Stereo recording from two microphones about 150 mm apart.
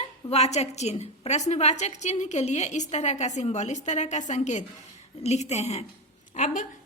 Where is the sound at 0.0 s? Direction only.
45° left (ahead or behind).